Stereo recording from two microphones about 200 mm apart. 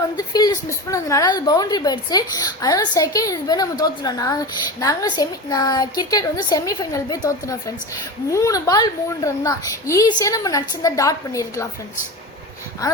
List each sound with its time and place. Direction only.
0.2 s a woman's voice: 20° left (ahead or behind)
12.8 s a woman's voice: 15° left (ahead or behind)